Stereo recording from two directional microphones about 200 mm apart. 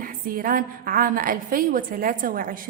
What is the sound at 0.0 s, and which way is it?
A woman's voice, 45° right (ahead or behind).